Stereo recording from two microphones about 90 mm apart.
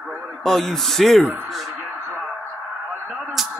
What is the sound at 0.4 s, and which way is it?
Speech, 5° left (ahead or behind).